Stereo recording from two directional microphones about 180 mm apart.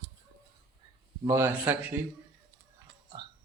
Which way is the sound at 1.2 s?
15° right (ahead or behind).